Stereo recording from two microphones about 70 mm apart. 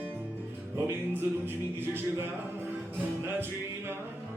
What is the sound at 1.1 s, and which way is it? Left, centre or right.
Music, right.